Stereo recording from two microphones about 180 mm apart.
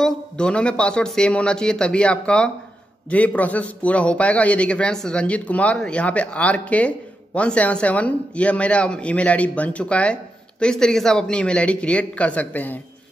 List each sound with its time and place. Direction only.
0.0 s a man's voice: 5° left (ahead or behind)